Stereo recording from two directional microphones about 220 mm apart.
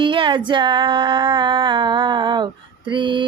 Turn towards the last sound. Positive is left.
turn(degrees=-20)  # may be behind; listen again after turning